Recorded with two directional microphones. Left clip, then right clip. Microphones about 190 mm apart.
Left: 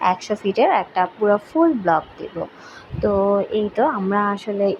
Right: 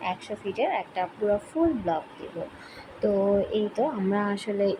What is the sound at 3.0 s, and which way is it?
Speech, 10° left (ahead or behind).